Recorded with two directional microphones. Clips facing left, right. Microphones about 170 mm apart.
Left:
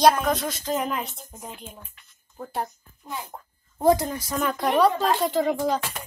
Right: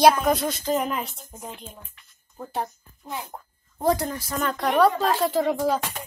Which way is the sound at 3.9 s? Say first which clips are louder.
Left 3 dB; 20° left (ahead or behind).